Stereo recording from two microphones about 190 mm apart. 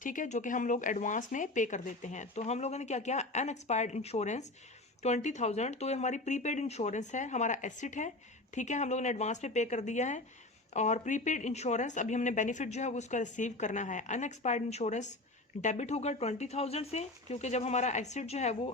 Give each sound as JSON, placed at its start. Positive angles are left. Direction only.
{"t": 0.0, "sound": "speech", "side_deg": 45}